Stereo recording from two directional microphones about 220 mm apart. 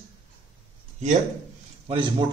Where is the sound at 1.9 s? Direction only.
20° right (ahead or behind).